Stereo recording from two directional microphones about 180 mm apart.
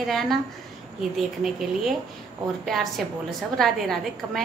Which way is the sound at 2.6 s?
Centre (ahead or behind).